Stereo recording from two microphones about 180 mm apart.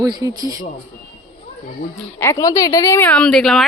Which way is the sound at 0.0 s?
20° right (ahead or behind).